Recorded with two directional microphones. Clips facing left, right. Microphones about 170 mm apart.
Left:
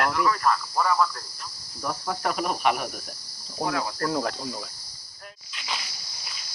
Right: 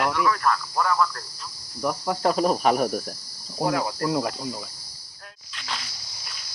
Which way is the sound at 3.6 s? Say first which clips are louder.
Right 3 dB; 10° right (ahead or behind).